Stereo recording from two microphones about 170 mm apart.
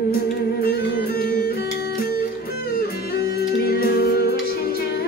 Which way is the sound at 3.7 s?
65° left (ahead or behind).